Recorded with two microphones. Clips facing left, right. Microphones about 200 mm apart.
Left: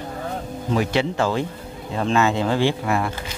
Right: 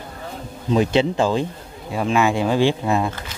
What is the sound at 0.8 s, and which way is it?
Speech, 20° right (ahead or behind).